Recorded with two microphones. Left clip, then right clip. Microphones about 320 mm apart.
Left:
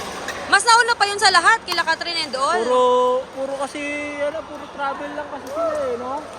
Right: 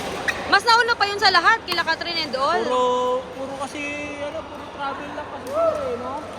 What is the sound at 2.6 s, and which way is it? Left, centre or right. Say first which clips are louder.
Speech: left 4 dB; left.